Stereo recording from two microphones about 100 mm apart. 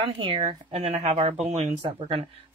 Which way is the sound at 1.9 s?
60° right (ahead or behind).